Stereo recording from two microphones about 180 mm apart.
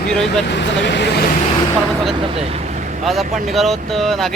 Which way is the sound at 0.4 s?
75° left (ahead or behind).